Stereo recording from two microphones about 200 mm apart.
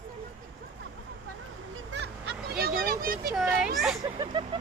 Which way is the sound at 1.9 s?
60° right (ahead or behind).